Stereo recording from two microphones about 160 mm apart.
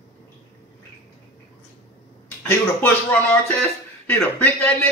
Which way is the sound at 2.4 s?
10° left (ahead or behind).